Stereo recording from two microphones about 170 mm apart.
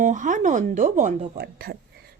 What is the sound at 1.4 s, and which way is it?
Speech, 65° right (ahead or behind).